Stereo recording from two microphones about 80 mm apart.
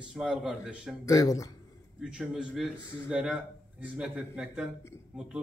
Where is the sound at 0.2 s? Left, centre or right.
Centre.